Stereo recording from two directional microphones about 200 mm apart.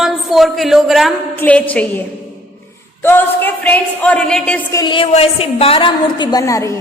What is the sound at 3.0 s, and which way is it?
A woman's voice, 10° left (ahead or behind).